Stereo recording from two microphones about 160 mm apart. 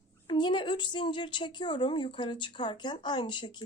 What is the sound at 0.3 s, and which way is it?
Speech, 30° left (ahead or behind).